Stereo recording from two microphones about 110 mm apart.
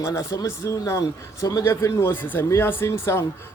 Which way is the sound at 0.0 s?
30° left (ahead or behind).